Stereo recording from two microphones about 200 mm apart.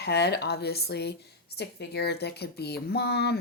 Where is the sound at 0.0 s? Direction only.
55° left (ahead or behind).